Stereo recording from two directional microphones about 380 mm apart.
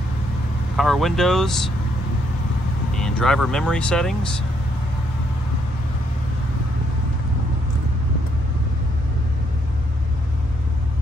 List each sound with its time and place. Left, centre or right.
0.7 s speech: centre
3.0 s speech: centre